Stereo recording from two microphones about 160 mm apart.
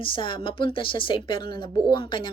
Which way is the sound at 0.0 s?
30° left (ahead or behind).